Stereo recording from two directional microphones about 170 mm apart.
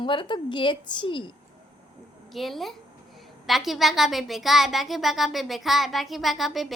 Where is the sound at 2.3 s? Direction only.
Centre (ahead or behind).